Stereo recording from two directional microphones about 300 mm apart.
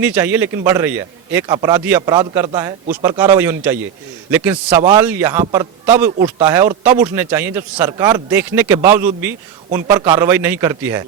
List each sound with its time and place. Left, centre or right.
0.0 s a man's voice: centre